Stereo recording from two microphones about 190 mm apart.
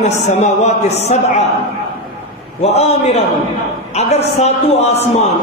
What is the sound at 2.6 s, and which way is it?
A man's voice, 35° left (ahead or behind).